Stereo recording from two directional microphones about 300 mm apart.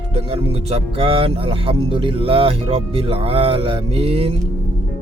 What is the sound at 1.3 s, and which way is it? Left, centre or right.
Music, centre.